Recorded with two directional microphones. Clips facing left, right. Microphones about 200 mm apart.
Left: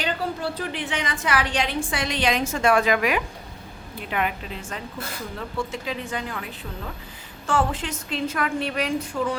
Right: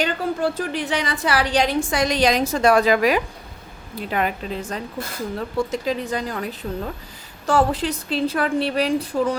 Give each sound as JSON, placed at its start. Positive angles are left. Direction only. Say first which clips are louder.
{"t": 0.0, "sound": "a woman's voice", "louder": "right 5 dB", "side_deg": -45}